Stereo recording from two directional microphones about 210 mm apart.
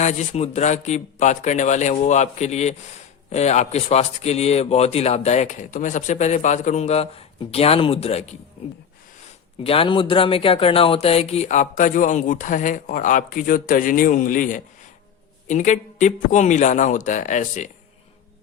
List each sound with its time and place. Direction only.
0.0 s speech: 35° left (ahead or behind)
9.6 s speech: 25° left (ahead or behind)